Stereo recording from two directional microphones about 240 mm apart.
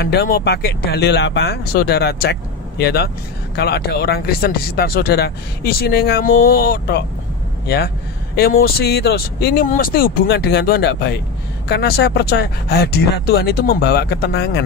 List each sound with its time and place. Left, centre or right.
0.0 s speech: left